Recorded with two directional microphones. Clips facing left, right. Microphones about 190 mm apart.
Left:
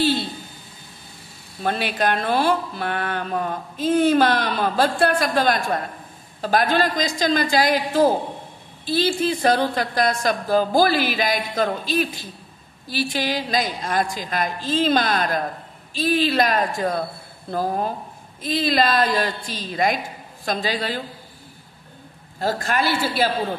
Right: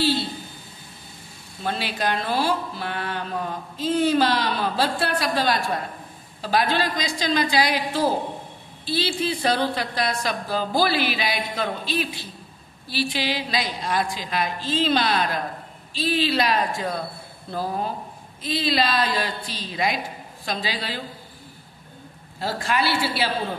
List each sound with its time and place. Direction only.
1.6 s speech: 50° left (ahead or behind)
18.4 s speech: 50° left (ahead or behind)
22.4 s speech: 45° left (ahead or behind)